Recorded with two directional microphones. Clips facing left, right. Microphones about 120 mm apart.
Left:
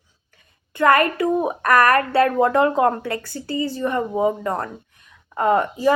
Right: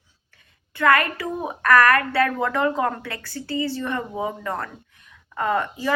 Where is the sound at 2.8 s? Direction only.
30° left (ahead or behind).